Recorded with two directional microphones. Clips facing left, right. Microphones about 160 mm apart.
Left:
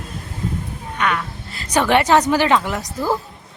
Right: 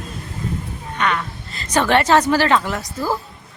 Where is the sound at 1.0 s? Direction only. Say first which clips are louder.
Even; 5° left (ahead or behind).